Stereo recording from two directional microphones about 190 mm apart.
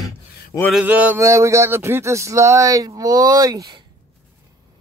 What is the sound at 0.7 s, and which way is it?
Speech, 10° right (ahead or behind).